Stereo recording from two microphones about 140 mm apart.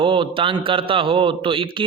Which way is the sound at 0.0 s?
40° right (ahead or behind).